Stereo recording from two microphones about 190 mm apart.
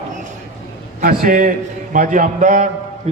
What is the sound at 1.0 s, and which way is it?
A man's voice, 50° right (ahead or behind).